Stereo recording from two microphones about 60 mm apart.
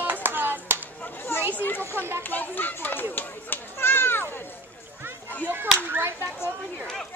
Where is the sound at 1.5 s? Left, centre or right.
Left.